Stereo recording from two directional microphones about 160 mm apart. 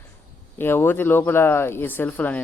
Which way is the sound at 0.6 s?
15° left (ahead or behind).